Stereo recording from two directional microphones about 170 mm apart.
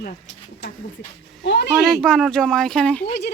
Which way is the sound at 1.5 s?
85° left.